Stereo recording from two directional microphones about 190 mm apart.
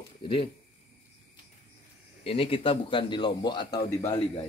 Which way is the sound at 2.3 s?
30° left (ahead or behind).